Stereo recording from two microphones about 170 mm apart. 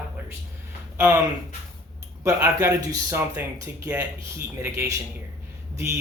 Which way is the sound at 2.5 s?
20° right (ahead or behind).